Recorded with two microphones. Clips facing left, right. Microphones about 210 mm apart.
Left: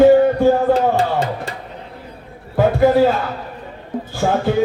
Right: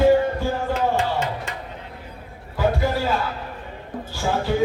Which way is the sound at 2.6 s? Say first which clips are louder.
Left 9 dB; 50° left (ahead or behind).